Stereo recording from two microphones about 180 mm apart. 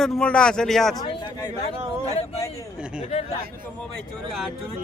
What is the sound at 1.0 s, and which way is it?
Speech, 20° left (ahead or behind).